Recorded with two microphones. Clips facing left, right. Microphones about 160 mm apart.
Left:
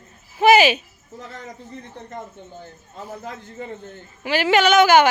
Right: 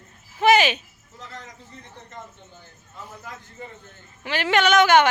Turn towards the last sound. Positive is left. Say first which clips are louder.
# left 3 dB
turn(degrees=5)  # may be behind; listen again after turning